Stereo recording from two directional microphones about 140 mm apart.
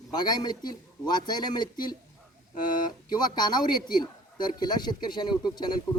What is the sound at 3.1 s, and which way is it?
A man's voice, 30° left (ahead or behind).